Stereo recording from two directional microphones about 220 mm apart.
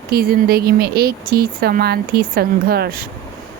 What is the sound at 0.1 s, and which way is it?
Speech, 45° right (ahead or behind).